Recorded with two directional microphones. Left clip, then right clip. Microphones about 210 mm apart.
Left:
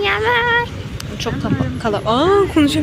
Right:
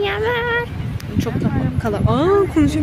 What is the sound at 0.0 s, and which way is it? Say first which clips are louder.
Female singing: left 4 dB; 20° right (ahead or behind).